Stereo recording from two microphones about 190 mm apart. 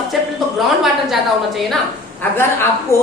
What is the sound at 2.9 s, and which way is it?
Speech, 15° left (ahead or behind).